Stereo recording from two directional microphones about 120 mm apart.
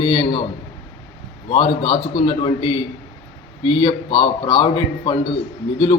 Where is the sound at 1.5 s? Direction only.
50° left (ahead or behind).